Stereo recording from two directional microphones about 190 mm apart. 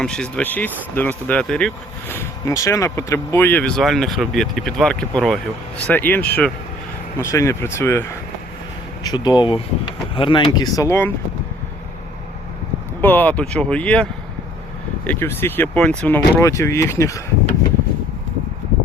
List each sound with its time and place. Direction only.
0.0 s speech: 5° left (ahead or behind)
9.0 s speech: 25° left (ahead or behind)
13.0 s speech: 10° left (ahead or behind)